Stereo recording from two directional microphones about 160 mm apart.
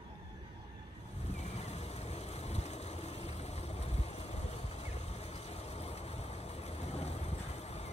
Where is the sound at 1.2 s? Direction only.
40° left (ahead or behind).